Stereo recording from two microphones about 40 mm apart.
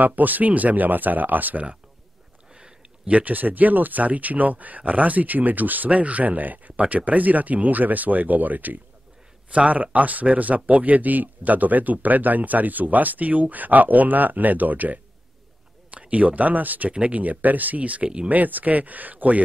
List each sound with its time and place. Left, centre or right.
0.0 s speech: right
3.1 s speech: right
9.5 s speech: right
18.3 s speech: right